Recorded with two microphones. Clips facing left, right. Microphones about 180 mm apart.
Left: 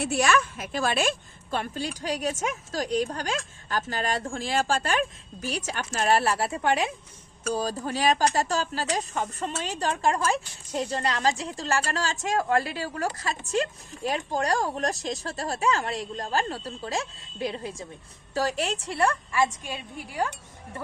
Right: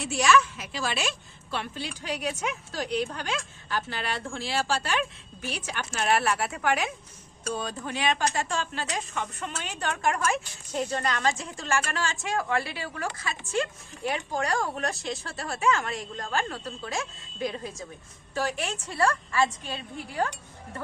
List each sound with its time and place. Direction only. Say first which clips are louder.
0.0 s a woman's voice: right 1 dB; 55° left (ahead or behind); by 17.8 s 30° left (ahead or behind)
18.3 s speech: left 3 dB; 40° left (ahead or behind)
18.9 s a woman's voice: right 2 dB; 20° left (ahead or behind)